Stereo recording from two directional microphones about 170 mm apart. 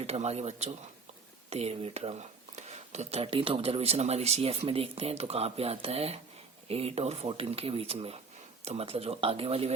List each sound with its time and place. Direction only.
0.0 s speech: 40° right (ahead or behind)